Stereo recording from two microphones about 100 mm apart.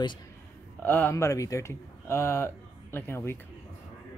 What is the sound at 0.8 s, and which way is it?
Speech, 20° left (ahead or behind).